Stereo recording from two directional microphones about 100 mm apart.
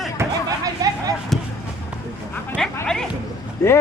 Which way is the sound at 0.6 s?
40° right (ahead or behind).